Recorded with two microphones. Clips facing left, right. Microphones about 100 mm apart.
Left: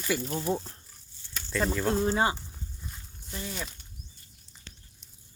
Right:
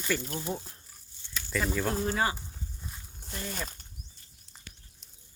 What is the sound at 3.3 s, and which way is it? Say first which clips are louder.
Speech: even; 45° right (ahead or behind).